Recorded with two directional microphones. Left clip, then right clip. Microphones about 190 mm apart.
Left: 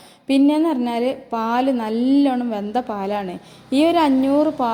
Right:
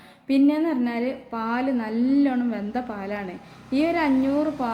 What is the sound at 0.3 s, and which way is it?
A woman's voice, 30° left (ahead or behind).